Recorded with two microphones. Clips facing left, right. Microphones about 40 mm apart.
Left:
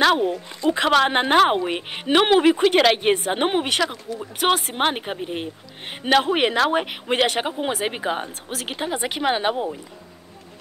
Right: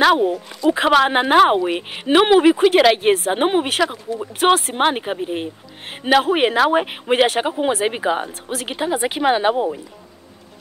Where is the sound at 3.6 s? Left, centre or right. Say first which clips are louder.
Right 3 dB; centre.